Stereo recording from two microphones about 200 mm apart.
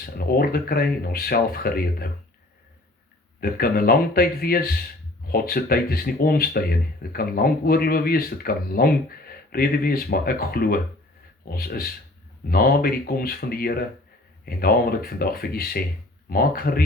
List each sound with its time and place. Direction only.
0.0 s speech: 50° left (ahead or behind)
3.4 s speech: 50° left (ahead or behind)